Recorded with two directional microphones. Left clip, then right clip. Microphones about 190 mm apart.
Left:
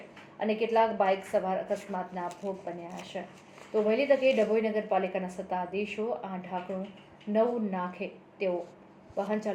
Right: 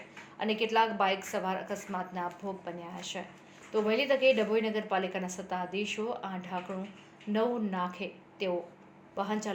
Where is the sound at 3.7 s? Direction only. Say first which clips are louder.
Left 3 dB; 30° right (ahead or behind).